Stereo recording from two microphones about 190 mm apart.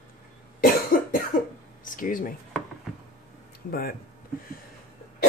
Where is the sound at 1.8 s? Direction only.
45° left (ahead or behind).